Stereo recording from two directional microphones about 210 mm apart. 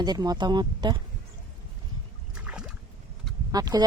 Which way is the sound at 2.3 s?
5° right (ahead or behind).